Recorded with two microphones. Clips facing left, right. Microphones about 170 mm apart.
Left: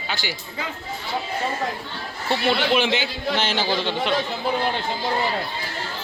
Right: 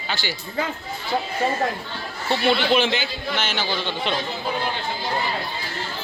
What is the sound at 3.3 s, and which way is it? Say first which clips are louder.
Speech: left 3 dB; 35° left (ahead or behind).